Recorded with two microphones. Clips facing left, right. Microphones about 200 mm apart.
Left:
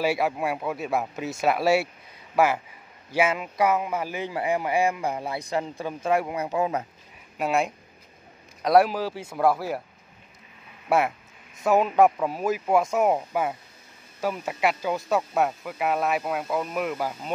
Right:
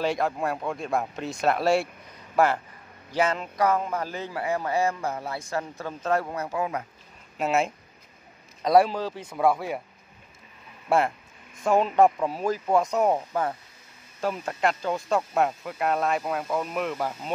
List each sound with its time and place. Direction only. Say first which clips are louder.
0.0 s a man's voice: left 1 dB; 10° left (ahead or behind)
7.3 s speech: even; centre (ahead or behind)
10.9 s a man's voice: even; 5° left (ahead or behind)